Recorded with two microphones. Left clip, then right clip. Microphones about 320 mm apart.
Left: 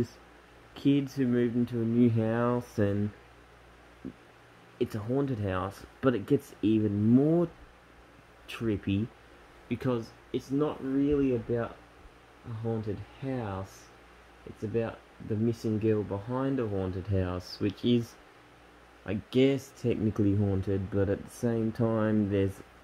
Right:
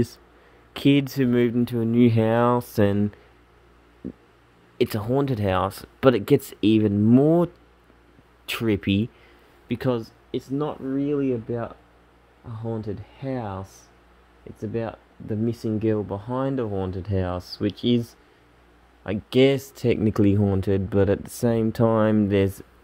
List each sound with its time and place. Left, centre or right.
0.7 s speech: right
4.7 s speech: right
8.5 s speech: right
12.6 s speech: right
14.7 s speech: right